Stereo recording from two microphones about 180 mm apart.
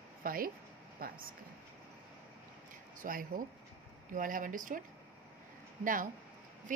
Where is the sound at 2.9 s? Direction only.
50° right (ahead or behind).